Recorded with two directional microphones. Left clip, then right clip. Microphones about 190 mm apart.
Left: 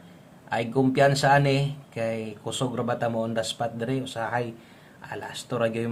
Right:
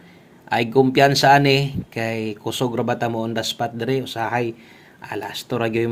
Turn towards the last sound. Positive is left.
turn(degrees=-30)  # may be behind; listen again after turning